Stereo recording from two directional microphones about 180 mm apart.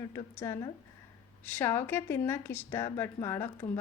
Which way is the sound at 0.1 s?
15° left (ahead or behind).